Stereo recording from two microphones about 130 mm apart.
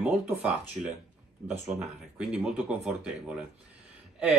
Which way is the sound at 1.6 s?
5° right (ahead or behind).